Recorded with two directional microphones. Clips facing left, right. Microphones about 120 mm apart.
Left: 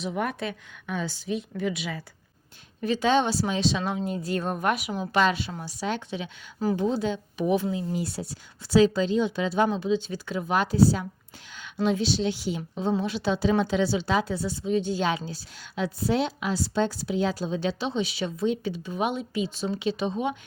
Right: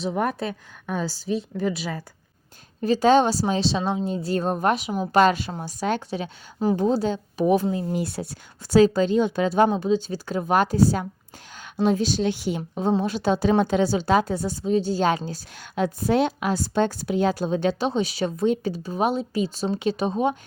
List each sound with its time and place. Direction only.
0.0 s a woman's voice: 35° right (ahead or behind)
5.1 s a woman's voice: 45° right (ahead or behind)